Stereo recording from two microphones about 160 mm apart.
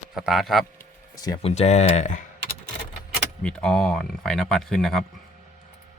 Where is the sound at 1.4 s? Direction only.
40° left (ahead or behind).